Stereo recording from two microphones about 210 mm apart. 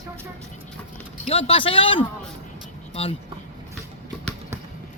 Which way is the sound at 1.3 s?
25° left (ahead or behind).